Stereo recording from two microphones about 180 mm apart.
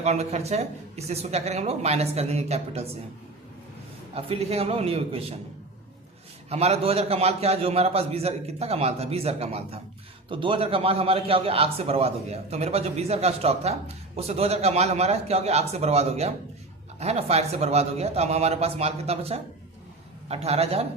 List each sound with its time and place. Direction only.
0.0 s a man's voice: 40° right (ahead or behind)
4.1 s a man's voice: 35° right (ahead or behind)
6.5 s a man's voice: 35° right (ahead or behind)